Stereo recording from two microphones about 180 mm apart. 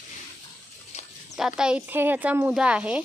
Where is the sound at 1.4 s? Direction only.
5° right (ahead or behind).